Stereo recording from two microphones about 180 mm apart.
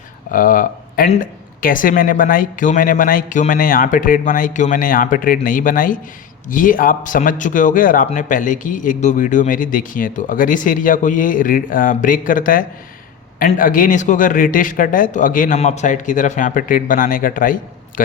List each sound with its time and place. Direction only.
0.3 s speech: 50° left (ahead or behind)